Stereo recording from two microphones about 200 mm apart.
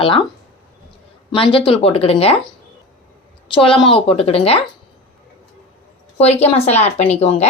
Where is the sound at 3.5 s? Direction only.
25° left (ahead or behind).